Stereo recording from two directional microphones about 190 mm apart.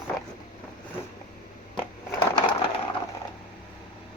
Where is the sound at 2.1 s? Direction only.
25° left (ahead or behind).